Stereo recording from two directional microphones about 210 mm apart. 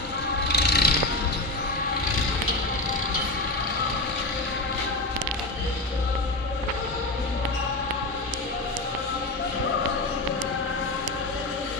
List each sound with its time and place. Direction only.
0.4 s music: 55° left (ahead or behind)